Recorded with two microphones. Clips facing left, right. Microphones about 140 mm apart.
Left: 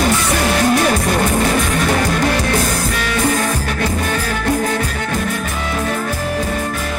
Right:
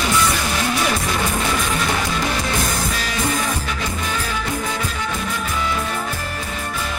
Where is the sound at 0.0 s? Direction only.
60° left (ahead or behind).